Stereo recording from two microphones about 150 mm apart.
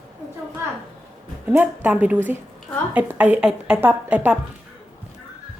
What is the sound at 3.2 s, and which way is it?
A woman's voice, 10° right (ahead or behind).